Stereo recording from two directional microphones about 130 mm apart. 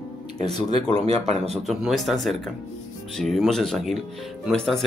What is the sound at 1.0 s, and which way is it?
Speech, 55° right (ahead or behind).